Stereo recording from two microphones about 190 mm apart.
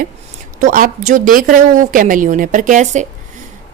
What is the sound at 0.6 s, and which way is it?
A woman's voice, 45° right (ahead or behind).